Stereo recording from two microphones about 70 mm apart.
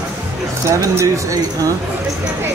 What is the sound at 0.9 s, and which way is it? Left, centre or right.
Speech, right.